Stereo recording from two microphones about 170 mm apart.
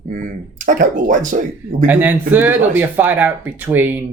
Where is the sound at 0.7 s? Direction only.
50° right (ahead or behind).